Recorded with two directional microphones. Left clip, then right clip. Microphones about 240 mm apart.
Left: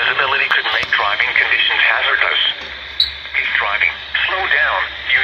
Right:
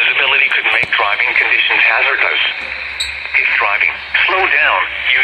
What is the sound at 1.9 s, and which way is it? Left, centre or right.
Speech, right.